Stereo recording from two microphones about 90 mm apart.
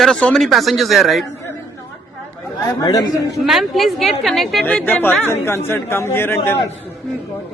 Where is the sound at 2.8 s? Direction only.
45° left (ahead or behind).